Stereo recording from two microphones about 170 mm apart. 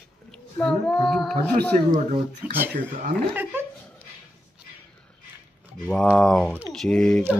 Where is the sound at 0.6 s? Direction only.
5° left (ahead or behind).